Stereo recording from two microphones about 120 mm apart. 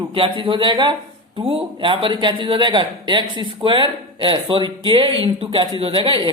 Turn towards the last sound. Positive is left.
turn(degrees=-45)  # may be behind; listen again after turning